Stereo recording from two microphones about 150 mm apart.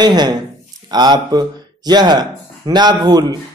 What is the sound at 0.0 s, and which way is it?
A man's voice, 30° right (ahead or behind).